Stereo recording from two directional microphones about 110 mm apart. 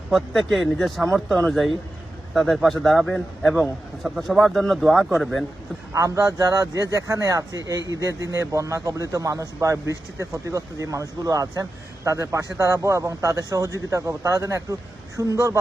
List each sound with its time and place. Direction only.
0.1 s a man's voice: centre (ahead or behind)
5.9 s a man's voice: 30° right (ahead or behind)